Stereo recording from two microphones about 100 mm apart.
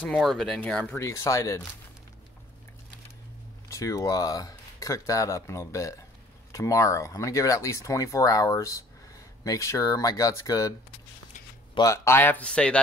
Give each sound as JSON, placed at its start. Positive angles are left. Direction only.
{"t": 0.1, "sound": "speech", "side_deg": 0}
{"t": 0.6, "sound": "speech", "side_deg": 15}
{"t": 0.9, "sound": "speech", "side_deg": 30}
{"t": 3.6, "sound": "speech", "side_deg": 35}
{"t": 11.8, "sound": "speech", "side_deg": 30}